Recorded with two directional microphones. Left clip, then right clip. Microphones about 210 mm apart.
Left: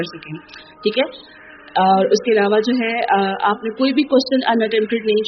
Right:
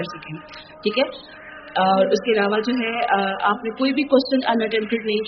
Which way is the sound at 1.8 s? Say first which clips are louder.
Left 3 dB; 25° left (ahead or behind).